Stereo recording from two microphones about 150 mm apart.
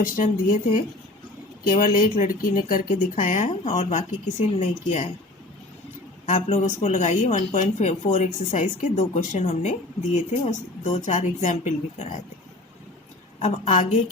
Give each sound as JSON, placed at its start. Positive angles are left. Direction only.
{"t": 0.0, "sound": "speech", "side_deg": 65}
{"t": 6.2, "sound": "speech", "side_deg": 50}
{"t": 13.4, "sound": "speech", "side_deg": 45}